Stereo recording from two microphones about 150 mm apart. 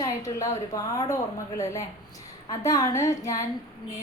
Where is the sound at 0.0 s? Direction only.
20° left (ahead or behind).